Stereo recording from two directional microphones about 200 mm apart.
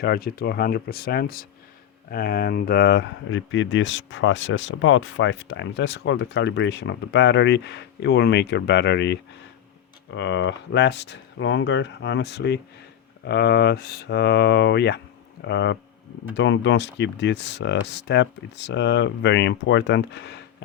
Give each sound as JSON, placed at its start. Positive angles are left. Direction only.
{"t": 0.0, "sound": "speech", "side_deg": 50}